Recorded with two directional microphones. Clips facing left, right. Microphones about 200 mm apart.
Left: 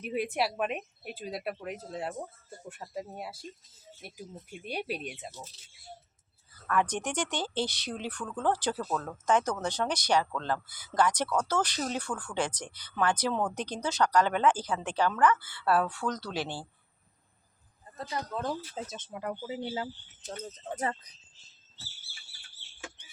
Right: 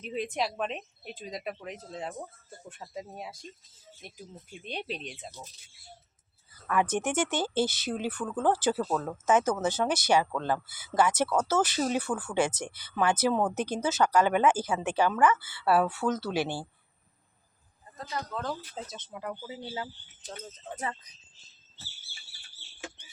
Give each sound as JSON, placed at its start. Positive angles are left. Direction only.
{"t": 0.0, "sound": "speech", "side_deg": 10}
{"t": 6.7, "sound": "speech", "side_deg": -5}
{"t": 17.9, "sound": "speech", "side_deg": 30}
{"t": 18.3, "sound": "speech", "side_deg": 15}
{"t": 19.6, "sound": "speech", "side_deg": 25}